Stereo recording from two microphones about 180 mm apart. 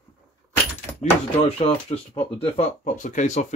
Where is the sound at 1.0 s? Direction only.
35° left (ahead or behind).